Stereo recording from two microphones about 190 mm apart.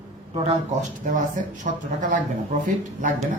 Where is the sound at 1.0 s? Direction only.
45° right (ahead or behind).